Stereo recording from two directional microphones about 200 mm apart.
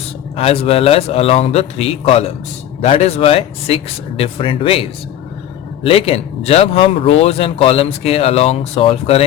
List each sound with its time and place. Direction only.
0.3 s speech: 30° left (ahead or behind)